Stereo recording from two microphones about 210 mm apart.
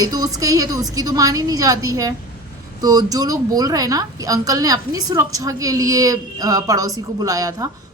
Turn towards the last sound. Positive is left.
turn(degrees=-15)  # may be behind; listen again after turning